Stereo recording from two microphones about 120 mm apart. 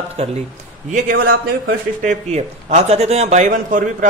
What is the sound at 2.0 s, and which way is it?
A man's voice, 65° right (ahead or behind).